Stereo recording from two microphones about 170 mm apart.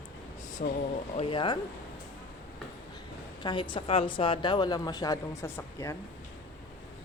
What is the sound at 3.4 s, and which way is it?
A woman's voice, 30° left (ahead or behind).